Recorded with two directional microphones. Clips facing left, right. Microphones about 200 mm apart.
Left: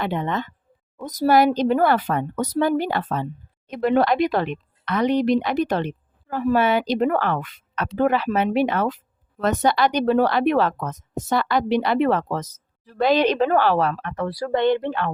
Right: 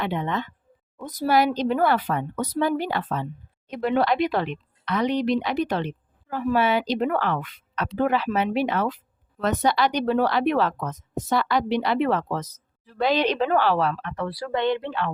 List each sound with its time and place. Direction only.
0.0 s a woman's voice: 45° left (ahead or behind)